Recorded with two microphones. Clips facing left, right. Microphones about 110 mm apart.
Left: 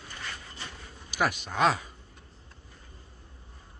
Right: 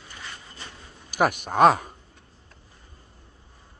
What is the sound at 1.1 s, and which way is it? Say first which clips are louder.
Speech: right 6 dB; 50° right (ahead or behind).